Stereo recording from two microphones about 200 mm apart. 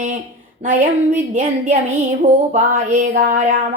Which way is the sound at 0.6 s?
40° right (ahead or behind).